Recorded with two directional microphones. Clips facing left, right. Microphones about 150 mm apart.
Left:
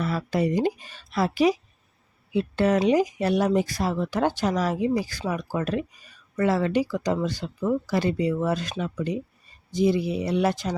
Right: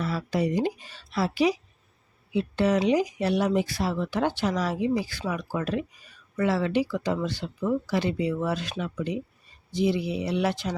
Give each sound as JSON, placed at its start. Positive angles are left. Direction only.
{"t": 0.0, "sound": "speech", "side_deg": 55}
{"t": 9.7, "sound": "speech", "side_deg": 45}